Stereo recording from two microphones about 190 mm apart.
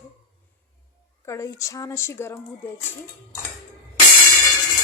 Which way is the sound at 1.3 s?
15° left (ahead or behind).